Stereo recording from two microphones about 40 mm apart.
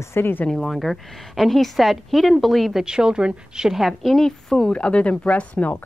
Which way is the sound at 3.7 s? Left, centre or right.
Centre.